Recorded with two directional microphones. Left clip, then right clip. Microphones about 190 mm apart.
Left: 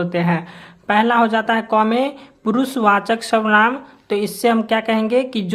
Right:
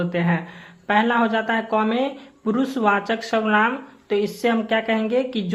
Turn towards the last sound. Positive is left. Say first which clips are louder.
# left 4 dB
turn(degrees=30)  # may be behind; listen again after turning